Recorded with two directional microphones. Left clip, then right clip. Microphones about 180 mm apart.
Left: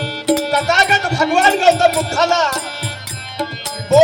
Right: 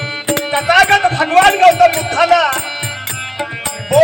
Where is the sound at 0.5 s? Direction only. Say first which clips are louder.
Right 3 dB; 30° left (ahead or behind).